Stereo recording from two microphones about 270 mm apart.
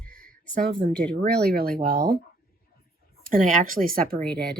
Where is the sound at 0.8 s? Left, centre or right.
Right.